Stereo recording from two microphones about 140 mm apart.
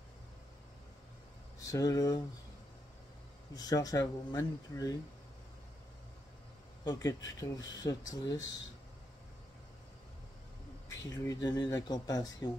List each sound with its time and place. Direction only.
1.6 s speech: 25° left (ahead or behind)
3.5 s speech: 25° left (ahead or behind)
6.8 s speech: 30° left (ahead or behind)
11.1 s speech: 25° left (ahead or behind)